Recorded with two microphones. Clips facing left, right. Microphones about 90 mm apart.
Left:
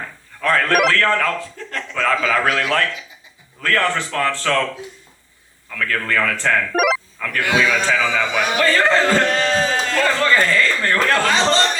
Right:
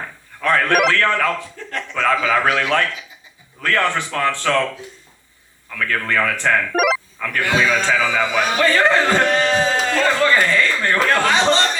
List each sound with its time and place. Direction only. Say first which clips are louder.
0.4 s a man's voice: even; 20° right (ahead or behind)
0.7 s a man's voice: even; 5° right (ahead or behind)
0.9 s a man's voice: even; 20° right (ahead or behind)
5.9 s speech: right 1 dB; 20° right (ahead or behind)
6.7 s telephone dialing: left 2 dB; centre (ahead or behind)
7.8 s a man's voice: right 1 dB; 15° right (ahead or behind)